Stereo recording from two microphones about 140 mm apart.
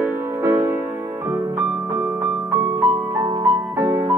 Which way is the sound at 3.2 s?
25° right (ahead or behind).